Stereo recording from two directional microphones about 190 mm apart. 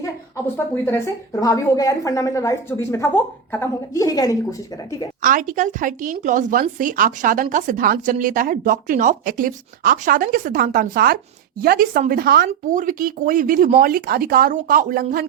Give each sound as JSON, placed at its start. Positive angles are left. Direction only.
{"t": 0.5, "sound": "a woman's voice", "side_deg": 15}
{"t": 5.2, "sound": "a woman's voice", "side_deg": -45}
{"t": 12.5, "sound": "a woman's voice", "side_deg": -45}